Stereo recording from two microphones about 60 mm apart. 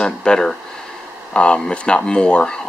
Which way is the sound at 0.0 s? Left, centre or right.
Centre.